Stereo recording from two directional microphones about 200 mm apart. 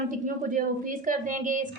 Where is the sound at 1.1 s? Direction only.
40° right (ahead or behind).